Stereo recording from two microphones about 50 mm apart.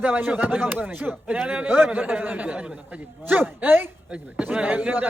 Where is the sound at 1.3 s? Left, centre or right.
Right.